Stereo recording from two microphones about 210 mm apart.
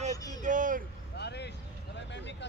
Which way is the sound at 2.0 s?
55° left (ahead or behind).